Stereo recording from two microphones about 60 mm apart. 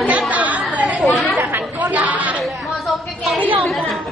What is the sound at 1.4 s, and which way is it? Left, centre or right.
Chatter, right.